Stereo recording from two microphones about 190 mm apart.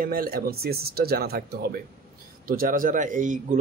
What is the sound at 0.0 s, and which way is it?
Speech, 50° right (ahead or behind).